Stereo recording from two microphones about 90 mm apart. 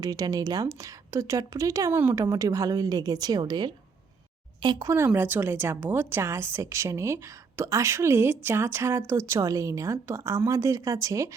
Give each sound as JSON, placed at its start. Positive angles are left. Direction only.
{"t": 0.0, "sound": "speech", "side_deg": -45}
{"t": 4.9, "sound": "speech", "side_deg": -30}